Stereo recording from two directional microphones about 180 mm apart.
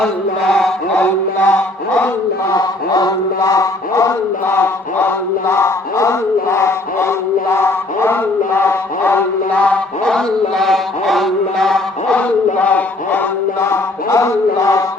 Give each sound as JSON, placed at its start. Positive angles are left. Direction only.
{"t": 0.5, "sound": "chant", "side_deg": 5}
{"t": 2.5, "sound": "chant", "side_deg": 20}
{"t": 7.5, "sound": "mantra", "side_deg": 15}